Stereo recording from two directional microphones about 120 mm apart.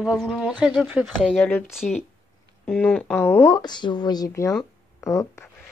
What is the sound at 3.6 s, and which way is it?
Speech, 40° left (ahead or behind).